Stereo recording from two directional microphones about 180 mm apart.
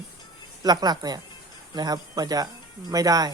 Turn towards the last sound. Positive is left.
turn(degrees=-20)  # may be behind; listen again after turning